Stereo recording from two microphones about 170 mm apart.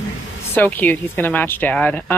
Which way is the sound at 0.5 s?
10° left (ahead or behind).